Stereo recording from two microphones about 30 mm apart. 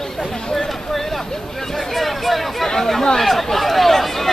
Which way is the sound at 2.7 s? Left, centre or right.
Centre.